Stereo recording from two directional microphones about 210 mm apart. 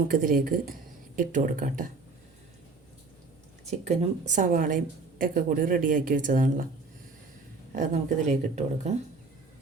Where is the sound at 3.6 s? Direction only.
30° right (ahead or behind).